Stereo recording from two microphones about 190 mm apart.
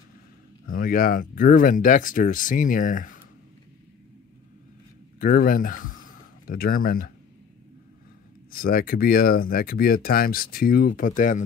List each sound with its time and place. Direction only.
0.7 s speech: 50° left (ahead or behind)
5.2 s speech: 45° left (ahead or behind)
5.9 s a sound: 45° left (ahead or behind)
8.5 s speech: 50° left (ahead or behind)